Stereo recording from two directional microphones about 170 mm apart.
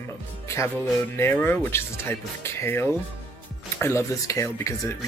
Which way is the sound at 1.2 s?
15° left (ahead or behind).